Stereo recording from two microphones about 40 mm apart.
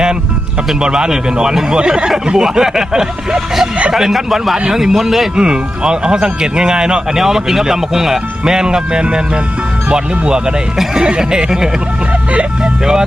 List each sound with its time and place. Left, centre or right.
0.8 s speech: centre
4.5 s speech: centre
5.4 s speech: right
7.2 s speech: centre
12.3 s speech: right
12.8 s speech: centre